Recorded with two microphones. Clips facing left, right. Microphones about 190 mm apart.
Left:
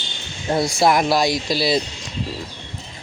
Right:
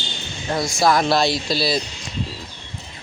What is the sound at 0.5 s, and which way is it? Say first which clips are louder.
Speech: left 1 dB; 25° left (ahead or behind).